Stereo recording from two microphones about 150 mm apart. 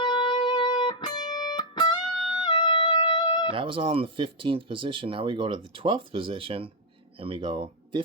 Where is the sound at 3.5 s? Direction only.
35° right (ahead or behind).